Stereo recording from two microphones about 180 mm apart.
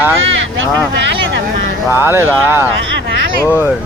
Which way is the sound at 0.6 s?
75° right (ahead or behind).